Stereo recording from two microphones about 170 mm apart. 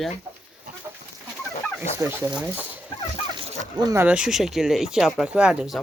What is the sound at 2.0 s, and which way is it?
Speech, 10° right (ahead or behind).